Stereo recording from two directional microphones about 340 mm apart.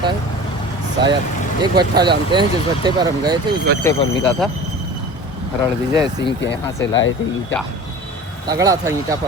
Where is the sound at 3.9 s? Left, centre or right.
Centre.